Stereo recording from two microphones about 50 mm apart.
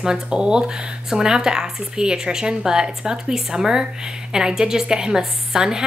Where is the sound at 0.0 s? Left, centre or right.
Centre.